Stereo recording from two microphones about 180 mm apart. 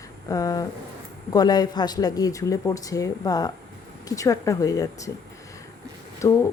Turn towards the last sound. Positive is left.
turn(degrees=15)  # may be behind; listen again after turning